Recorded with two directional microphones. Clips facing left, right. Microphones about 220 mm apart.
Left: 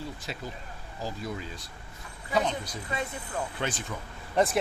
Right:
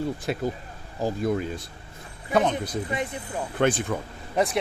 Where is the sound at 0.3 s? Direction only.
55° right (ahead or behind).